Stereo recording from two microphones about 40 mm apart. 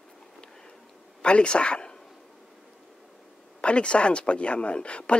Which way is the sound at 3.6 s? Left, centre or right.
Left.